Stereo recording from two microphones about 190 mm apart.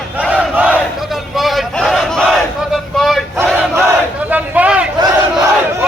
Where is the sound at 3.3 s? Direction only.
10° right (ahead or behind).